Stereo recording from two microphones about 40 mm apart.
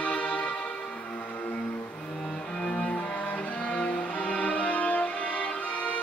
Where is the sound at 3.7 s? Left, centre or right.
Left.